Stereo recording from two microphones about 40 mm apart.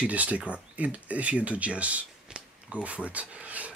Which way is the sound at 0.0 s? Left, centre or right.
Right.